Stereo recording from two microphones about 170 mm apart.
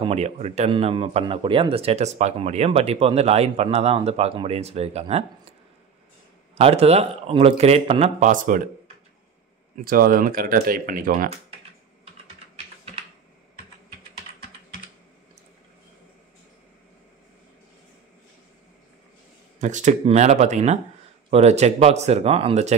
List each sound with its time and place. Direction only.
0.0 s speech: 40° right (ahead or behind)
6.5 s speech: 40° right (ahead or behind)
8.2 s speech: 50° right (ahead or behind)
9.8 s speech: 60° right (ahead or behind)
19.6 s speech: 45° right (ahead or behind)